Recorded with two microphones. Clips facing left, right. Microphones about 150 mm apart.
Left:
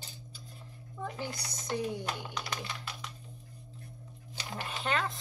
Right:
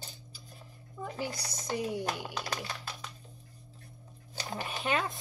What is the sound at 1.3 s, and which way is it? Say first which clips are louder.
Speech: right 1 dB; 35° right (ahead or behind).